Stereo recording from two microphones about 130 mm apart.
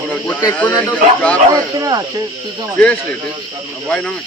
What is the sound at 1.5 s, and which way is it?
Speech, 30° right (ahead or behind).